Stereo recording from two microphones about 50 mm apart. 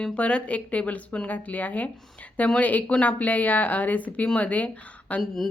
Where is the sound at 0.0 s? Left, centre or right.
Left.